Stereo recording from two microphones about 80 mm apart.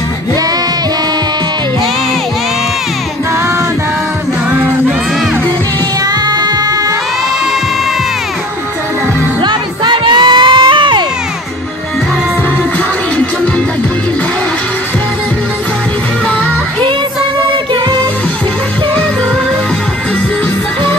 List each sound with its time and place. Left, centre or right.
6.0 s music: right
9.4 s crowd: right